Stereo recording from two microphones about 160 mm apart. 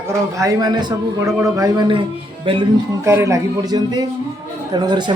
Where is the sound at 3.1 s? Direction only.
20° right (ahead or behind).